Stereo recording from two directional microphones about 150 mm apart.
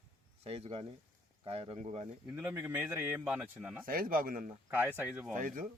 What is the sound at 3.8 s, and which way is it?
Speech, 70° right (ahead or behind).